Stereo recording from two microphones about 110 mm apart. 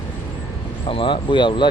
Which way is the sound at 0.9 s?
50° left (ahead or behind).